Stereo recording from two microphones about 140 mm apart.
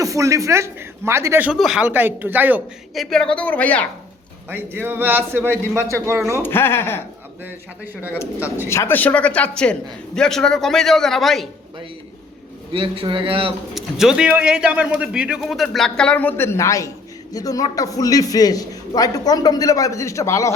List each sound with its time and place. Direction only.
0.0 s speech: 25° right (ahead or behind)
1.5 s a man's voice: 5° right (ahead or behind)
2.9 s a woman's voice: centre (ahead or behind)
4.4 s a man's voice: 15° right (ahead or behind)
6.4 s a woman's voice: 15° left (ahead or behind)
8.7 s a woman's voice: 15° left (ahead or behind)
12.7 s speech: 40° right (ahead or behind)
13.7 s a man's voice: 5° right (ahead or behind); by 20.5 s 20° left (ahead or behind)